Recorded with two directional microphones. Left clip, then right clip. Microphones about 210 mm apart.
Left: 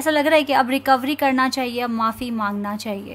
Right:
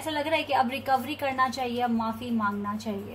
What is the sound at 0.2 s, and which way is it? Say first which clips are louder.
A woman's voice: left 6 dB; 50° left (ahead or behind).